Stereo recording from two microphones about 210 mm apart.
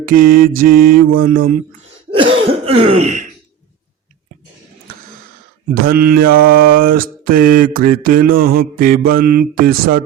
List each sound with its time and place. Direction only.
0.0 s mantra: 40° right (ahead or behind)
2.0 s cough: 25° right (ahead or behind)
5.9 s mantra: 45° right (ahead or behind)